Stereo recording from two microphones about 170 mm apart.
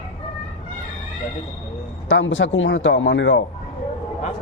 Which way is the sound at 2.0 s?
90° left.